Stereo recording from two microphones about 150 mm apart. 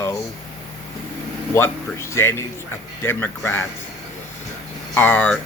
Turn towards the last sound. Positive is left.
turn(degrees=10)  # may be behind; listen again after turning